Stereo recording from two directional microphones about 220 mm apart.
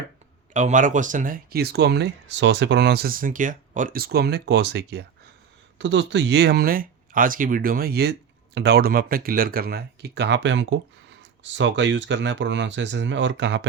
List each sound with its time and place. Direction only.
0.5 s speech: 35° right (ahead or behind); by 13.7 s 55° right (ahead or behind)